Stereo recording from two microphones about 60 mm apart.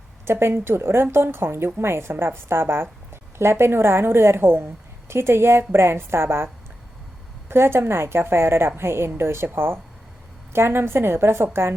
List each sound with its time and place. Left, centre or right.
0.3 s a woman's voice: right